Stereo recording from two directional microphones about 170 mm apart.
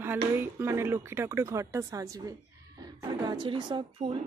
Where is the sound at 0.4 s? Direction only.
15° right (ahead or behind).